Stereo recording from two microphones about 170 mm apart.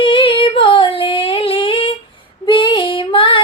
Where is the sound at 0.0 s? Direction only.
30° left (ahead or behind).